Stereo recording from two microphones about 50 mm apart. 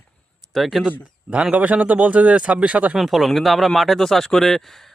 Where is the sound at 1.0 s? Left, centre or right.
Right.